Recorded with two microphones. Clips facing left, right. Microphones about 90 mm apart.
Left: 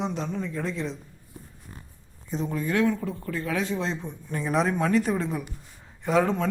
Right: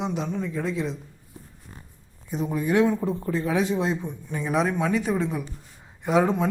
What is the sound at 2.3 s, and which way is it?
Speech, 10° right (ahead or behind).